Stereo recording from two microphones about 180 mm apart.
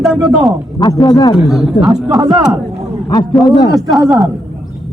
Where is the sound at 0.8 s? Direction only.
25° left (ahead or behind).